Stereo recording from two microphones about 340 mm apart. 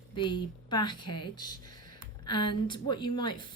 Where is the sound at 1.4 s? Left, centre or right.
Left.